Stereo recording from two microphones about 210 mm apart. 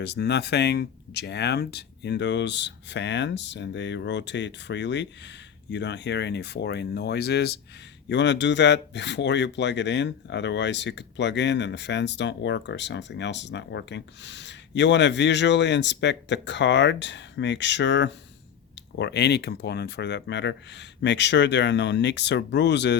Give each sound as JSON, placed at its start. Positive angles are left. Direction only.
{"t": 0.0, "sound": "speech", "side_deg": 55}